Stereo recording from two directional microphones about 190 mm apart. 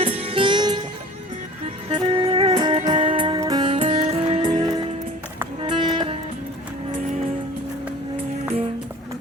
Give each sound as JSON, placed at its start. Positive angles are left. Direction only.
{"t": 0.0, "sound": "music", "side_deg": -30}
{"t": 1.9, "sound": "music", "side_deg": -25}